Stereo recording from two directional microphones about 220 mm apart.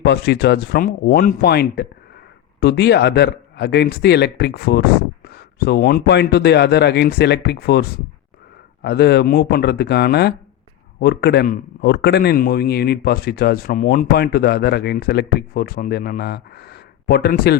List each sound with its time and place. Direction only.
0.0 s a man's voice: 50° left (ahead or behind)